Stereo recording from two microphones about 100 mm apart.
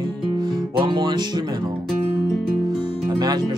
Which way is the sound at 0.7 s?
50° right (ahead or behind).